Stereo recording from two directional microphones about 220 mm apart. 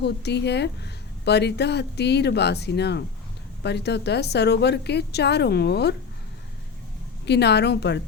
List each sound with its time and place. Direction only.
0.0 s a woman's voice: 50° left (ahead or behind)
7.3 s a woman's voice: 50° left (ahead or behind)